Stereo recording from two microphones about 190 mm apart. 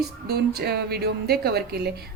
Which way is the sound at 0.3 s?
55° right (ahead or behind).